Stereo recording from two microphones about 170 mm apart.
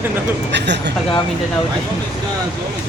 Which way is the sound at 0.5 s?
90° right.